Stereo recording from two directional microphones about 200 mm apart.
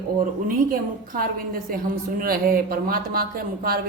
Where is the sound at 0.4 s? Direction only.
45° right (ahead or behind).